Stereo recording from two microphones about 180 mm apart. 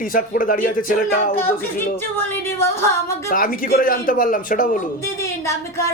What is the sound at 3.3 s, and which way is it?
A man's voice, 50° left (ahead or behind).